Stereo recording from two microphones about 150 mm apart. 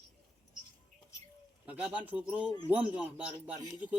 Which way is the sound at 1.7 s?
10° right (ahead or behind).